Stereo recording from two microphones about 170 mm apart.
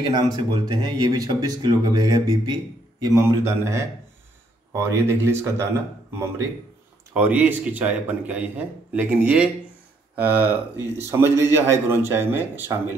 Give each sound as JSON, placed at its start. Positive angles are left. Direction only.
{"t": 0.0, "sound": "a man's voice", "side_deg": -25}
{"t": 7.2, "sound": "a man's voice", "side_deg": -10}